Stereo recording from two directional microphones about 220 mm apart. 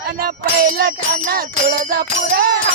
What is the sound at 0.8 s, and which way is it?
Music, 45° right (ahead or behind).